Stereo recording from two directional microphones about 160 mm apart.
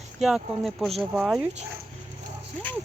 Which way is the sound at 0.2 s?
Centre (ahead or behind).